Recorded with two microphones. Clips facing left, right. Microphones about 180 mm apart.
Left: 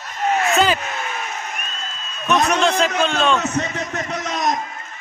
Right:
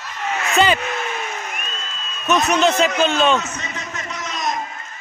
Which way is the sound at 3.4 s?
60° left (ahead or behind).